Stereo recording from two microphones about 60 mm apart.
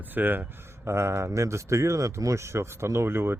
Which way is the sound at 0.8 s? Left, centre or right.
Right.